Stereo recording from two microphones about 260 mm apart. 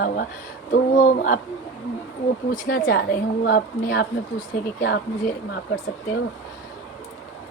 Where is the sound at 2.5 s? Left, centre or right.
Left.